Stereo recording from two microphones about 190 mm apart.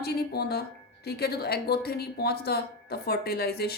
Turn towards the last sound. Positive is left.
turn(degrees=55)  # may be behind; listen again after turning